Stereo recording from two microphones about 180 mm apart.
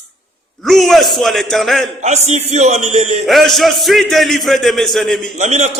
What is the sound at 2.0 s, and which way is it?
A man's voice, 40° right (ahead or behind).